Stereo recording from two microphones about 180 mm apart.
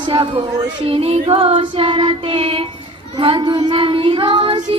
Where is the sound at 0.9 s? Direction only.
35° right (ahead or behind).